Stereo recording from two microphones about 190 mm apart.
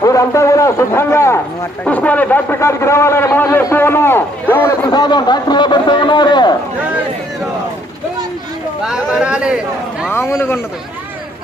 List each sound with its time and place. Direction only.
0.0 s a man's voice: 15° left (ahead or behind)
4.9 s a man's voice: 20° left (ahead or behind)
8.8 s speech: 5° right (ahead or behind)
10.1 s a man's voice: 15° left (ahead or behind)